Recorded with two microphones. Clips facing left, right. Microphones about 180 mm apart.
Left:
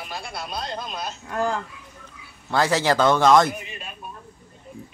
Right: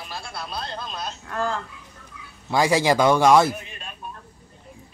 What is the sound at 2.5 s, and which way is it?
A man's voice, 10° right (ahead or behind).